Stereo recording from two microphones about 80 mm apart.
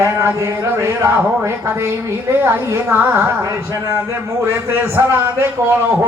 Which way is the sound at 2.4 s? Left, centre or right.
Right.